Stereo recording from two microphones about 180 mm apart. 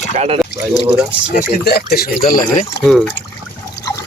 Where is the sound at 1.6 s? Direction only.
60° left (ahead or behind).